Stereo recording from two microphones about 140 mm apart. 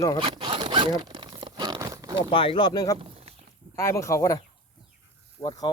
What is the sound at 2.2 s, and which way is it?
Speech, 40° left (ahead or behind).